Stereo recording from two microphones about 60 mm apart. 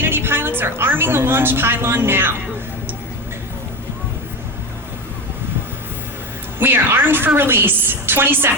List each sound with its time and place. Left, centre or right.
0.0 s a woman's voice: right
6.6 s a woman's voice: right